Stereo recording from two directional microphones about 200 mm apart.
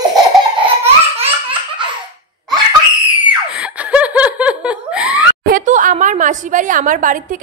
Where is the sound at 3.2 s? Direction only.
5° right (ahead or behind).